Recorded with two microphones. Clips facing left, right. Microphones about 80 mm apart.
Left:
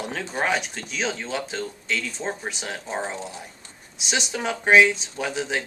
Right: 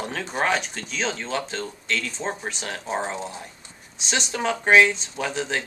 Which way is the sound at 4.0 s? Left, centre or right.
Centre.